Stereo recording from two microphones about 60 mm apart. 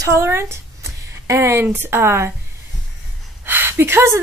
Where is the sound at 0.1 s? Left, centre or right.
Right.